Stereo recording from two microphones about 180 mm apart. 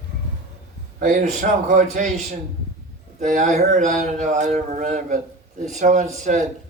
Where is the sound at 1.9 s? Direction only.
40° right (ahead or behind).